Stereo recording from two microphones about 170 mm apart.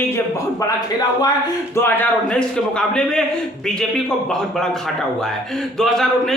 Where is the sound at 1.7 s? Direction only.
10° left (ahead or behind).